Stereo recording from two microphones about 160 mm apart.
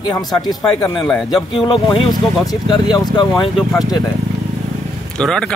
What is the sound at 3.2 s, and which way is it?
Speech, 30° left (ahead or behind).